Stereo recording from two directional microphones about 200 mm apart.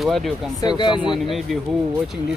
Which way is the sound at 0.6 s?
20° left (ahead or behind).